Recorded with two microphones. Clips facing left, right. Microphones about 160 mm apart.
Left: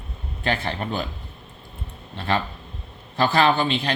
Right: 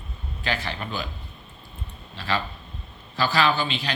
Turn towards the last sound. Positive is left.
turn(degrees=55)  # may be behind; listen again after turning